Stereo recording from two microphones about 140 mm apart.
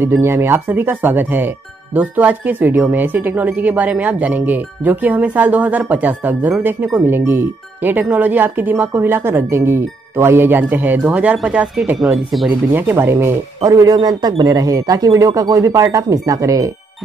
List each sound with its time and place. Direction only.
0.0 s speech: 15° right (ahead or behind); by 12.5 s centre (ahead or behind)
12.7 s speech: 15° right (ahead or behind)